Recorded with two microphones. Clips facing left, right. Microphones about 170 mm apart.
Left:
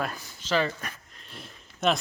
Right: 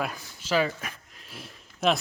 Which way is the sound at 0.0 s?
10° right (ahead or behind).